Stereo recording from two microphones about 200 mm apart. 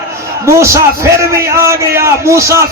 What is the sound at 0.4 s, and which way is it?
A man's voice, 15° right (ahead or behind).